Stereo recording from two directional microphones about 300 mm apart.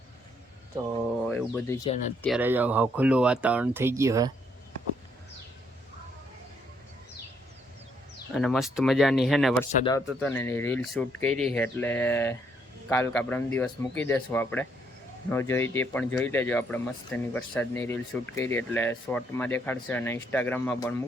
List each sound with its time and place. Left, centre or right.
1.3 s speech: centre
2.2 s speech: centre
8.3 s speech: centre